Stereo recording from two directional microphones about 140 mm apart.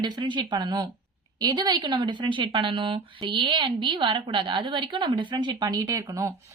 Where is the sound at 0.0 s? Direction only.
35° right (ahead or behind).